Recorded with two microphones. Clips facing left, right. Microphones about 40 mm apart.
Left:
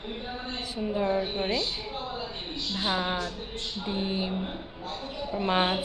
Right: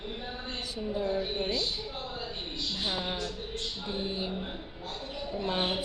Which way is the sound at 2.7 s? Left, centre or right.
Left.